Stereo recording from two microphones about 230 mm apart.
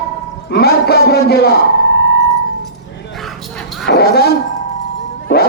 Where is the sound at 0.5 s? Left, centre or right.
Left.